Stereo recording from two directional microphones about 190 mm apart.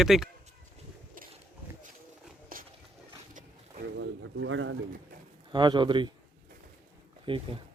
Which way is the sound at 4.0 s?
75° right (ahead or behind).